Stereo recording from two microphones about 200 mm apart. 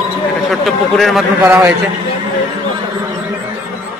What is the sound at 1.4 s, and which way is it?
Speech, 10° right (ahead or behind).